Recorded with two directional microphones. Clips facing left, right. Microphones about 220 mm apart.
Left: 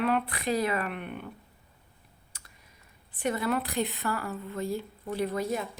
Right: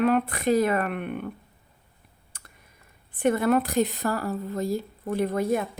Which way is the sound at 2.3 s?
55° right (ahead or behind).